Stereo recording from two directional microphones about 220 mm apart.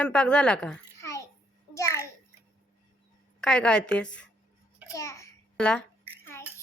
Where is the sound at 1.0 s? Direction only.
15° left (ahead or behind).